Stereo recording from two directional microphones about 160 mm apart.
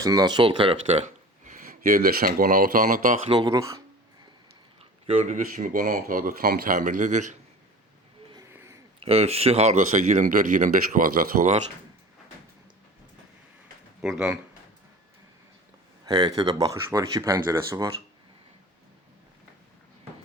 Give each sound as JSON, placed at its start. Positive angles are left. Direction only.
{"t": 0.0, "sound": "speech", "side_deg": -25}
{"t": 3.2, "sound": "speech", "side_deg": -25}
{"t": 4.8, "sound": "speech", "side_deg": -40}
{"t": 9.0, "sound": "speech", "side_deg": -40}
{"t": 14.0, "sound": "speech", "side_deg": -5}
{"t": 16.0, "sound": "speech", "side_deg": -25}